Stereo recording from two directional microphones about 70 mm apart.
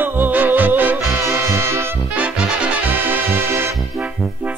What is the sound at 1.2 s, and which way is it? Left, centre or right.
Music, right.